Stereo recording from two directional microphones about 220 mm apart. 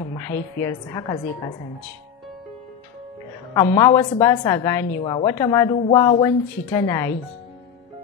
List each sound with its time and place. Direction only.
0.2 s a woman's voice: 10° left (ahead or behind)
3.5 s a woman's voice: 15° left (ahead or behind)